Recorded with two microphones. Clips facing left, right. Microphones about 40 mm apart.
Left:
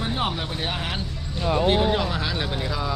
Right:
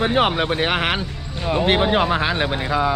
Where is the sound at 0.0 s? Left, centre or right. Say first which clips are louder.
Right 9 dB; right.